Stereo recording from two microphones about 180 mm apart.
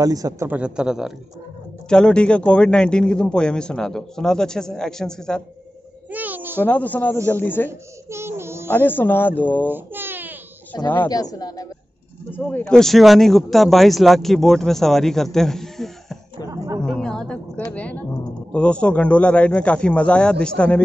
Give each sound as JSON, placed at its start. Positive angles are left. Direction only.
{"t": 0.0, "sound": "speech", "side_deg": -20}
{"t": 6.1, "sound": "a sound", "side_deg": -10}
{"t": 6.6, "sound": "speech", "side_deg": 10}
{"t": 8.1, "sound": "a sound", "side_deg": -15}
{"t": 8.6, "sound": "speech", "side_deg": 10}
{"t": 9.7, "sound": "baby cry", "side_deg": -10}
{"t": 10.7, "sound": "speech", "side_deg": 20}
{"t": 12.4, "sound": "speech", "side_deg": 5}
{"t": 16.4, "sound": "speech", "side_deg": -20}
{"t": 16.8, "sound": "speech", "side_deg": 5}